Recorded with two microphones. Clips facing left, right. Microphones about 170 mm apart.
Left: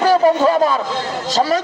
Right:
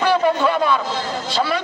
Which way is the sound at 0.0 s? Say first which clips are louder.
Left 4 dB; 40° left (ahead or behind).